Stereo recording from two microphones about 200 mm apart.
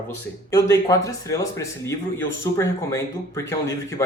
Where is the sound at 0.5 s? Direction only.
15° left (ahead or behind).